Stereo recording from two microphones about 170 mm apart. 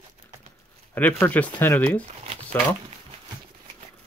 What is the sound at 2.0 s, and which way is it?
Speech, 40° right (ahead or behind).